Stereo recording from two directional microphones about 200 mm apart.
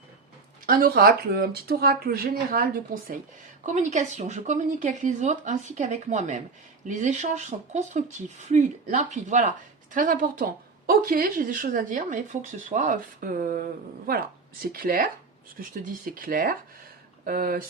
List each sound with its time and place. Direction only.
0.6 s speech: 45° right (ahead or behind)
3.7 s speech: 35° right (ahead or behind)